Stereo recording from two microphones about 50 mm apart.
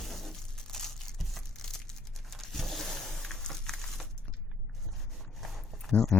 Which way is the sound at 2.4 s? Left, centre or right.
Centre.